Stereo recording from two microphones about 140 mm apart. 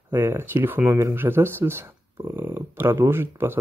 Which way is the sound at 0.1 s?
15° right (ahead or behind).